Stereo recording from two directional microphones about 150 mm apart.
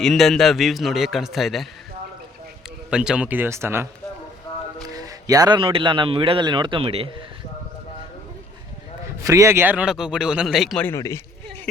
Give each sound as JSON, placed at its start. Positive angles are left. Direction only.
{"t": 0.0, "sound": "a man's voice", "side_deg": 0}
{"t": 2.9, "sound": "speech", "side_deg": -5}
{"t": 4.9, "sound": "a man's voice", "side_deg": -25}
{"t": 9.2, "sound": "a man's voice", "side_deg": -20}
{"t": 10.8, "sound": "a man's voice", "side_deg": 20}